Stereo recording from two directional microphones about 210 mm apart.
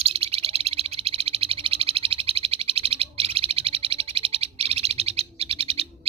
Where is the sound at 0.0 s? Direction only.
30° right (ahead or behind).